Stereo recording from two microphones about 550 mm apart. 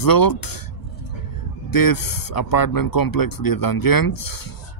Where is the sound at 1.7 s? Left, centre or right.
Left.